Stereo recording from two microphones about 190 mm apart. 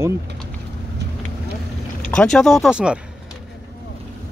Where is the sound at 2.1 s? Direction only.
5° left (ahead or behind).